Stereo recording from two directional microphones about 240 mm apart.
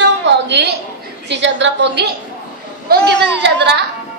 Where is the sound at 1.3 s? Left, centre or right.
Right.